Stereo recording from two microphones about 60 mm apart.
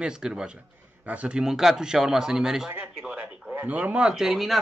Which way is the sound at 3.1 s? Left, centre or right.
Right.